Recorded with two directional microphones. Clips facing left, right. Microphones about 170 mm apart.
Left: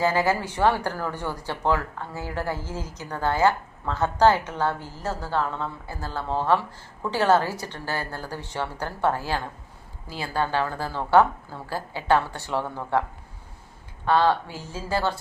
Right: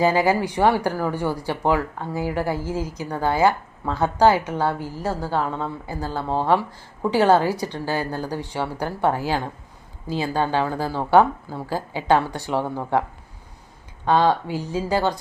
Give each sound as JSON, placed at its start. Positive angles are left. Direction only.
{"t": 0.0, "sound": "speech", "side_deg": -15}